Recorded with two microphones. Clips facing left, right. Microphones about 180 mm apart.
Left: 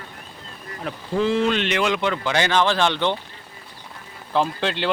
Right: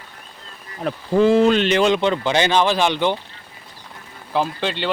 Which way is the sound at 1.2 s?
45° right (ahead or behind).